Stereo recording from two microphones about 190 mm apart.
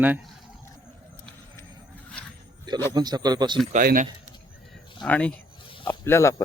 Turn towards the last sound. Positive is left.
turn(degrees=15)  # may be behind; listen again after turning